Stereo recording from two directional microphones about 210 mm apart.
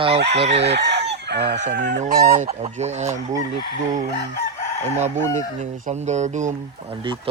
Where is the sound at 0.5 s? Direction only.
55° right (ahead or behind).